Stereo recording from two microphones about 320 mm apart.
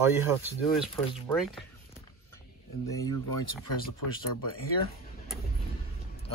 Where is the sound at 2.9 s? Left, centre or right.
Centre.